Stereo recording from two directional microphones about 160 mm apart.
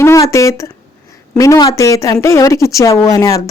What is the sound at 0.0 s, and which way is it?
Speech, 20° left (ahead or behind).